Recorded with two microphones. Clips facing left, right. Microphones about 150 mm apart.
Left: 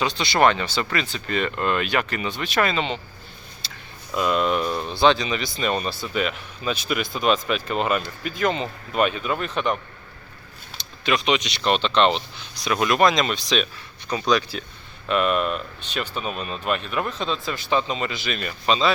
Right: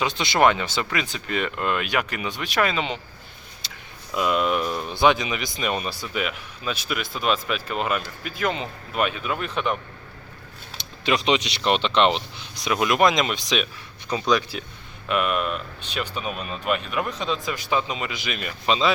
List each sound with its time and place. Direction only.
0.0 s speech: 15° right (ahead or behind)
4.1 s speech: 5° right (ahead or behind)
11.0 s speech: 25° right (ahead or behind)